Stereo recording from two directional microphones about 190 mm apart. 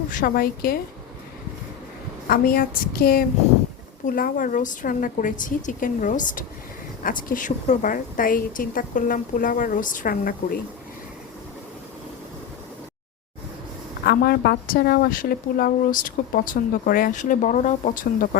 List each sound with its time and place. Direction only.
0.1 s a woman's voice: 50° left (ahead or behind)
2.2 s a woman's voice: 50° left (ahead or behind)
14.0 s a woman's voice: 55° left (ahead or behind)